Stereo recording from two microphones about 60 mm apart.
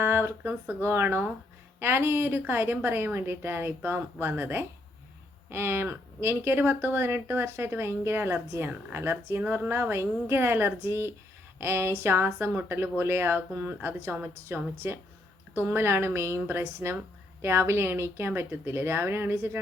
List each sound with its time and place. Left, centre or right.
0.0 s speech: right